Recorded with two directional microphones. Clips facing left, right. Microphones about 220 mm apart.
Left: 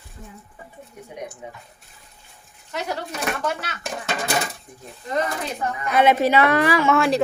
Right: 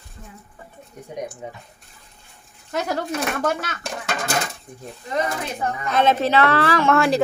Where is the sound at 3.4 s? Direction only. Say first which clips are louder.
Right 3 dB; 45° right (ahead or behind).